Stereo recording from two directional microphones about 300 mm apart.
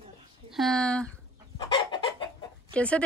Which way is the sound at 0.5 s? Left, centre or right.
Centre.